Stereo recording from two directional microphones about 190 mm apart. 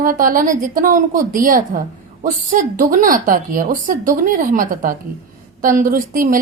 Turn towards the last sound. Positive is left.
turn(degrees=-45)  # may be behind; listen again after turning